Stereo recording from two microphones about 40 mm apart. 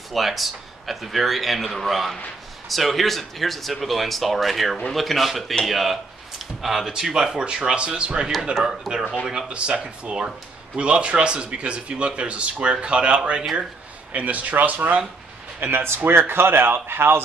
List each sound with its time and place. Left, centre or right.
0.1 s speech: centre
9.5 s speech: right
14.1 s speech: right
15.6 s speech: right